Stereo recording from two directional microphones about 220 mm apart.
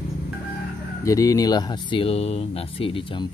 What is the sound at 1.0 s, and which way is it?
Speech, 15° left (ahead or behind).